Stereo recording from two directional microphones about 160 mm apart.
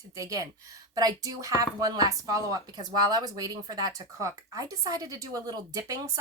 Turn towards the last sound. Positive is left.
turn(degrees=-20)  # may be behind; listen again after turning